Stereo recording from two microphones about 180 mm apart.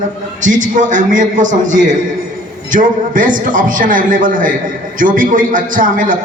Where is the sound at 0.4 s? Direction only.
45° right (ahead or behind).